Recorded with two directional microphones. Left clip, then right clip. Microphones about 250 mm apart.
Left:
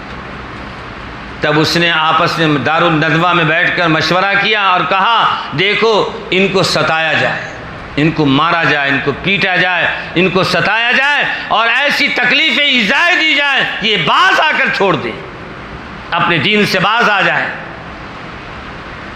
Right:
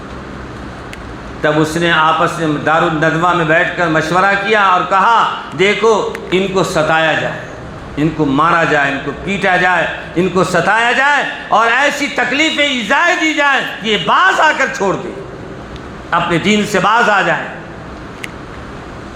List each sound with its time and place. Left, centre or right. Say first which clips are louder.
1.4 s a man's voice: left 2 dB; left
16.0 s a man's voice: left 1 dB; left